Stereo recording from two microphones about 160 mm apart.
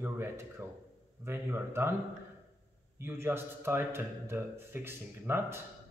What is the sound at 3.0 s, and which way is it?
Speech, 15° right (ahead or behind).